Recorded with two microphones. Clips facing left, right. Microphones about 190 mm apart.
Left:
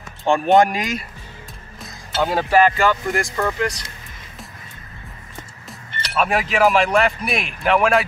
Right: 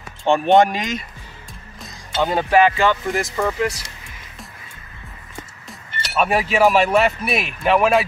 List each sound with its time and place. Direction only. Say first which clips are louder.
0.2 s speech: right 1 dB; centre (ahead or behind)
5.7 s speech: left 1 dB; 5° right (ahead or behind)